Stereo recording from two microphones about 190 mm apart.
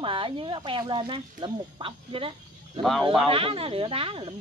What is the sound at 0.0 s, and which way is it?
Speech, 25° right (ahead or behind).